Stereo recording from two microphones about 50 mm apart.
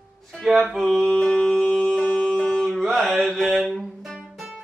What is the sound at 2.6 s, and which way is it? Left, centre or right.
Music, centre.